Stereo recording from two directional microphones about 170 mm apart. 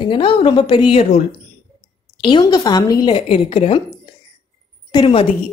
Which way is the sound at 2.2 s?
25° left (ahead or behind).